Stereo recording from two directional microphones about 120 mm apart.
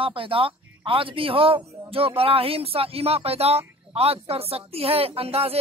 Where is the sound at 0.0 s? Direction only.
45° right (ahead or behind).